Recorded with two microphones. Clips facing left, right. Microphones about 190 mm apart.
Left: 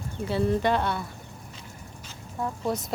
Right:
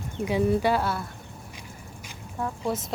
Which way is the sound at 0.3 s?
10° right (ahead or behind).